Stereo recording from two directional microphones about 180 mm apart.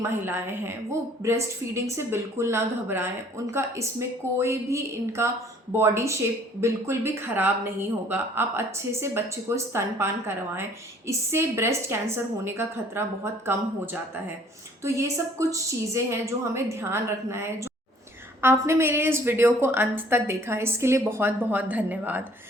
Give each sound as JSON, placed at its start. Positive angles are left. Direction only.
{"t": 0.1, "sound": "speech", "side_deg": -15}
{"t": 14.8, "sound": "speech", "side_deg": -15}
{"t": 18.4, "sound": "speech", "side_deg": -15}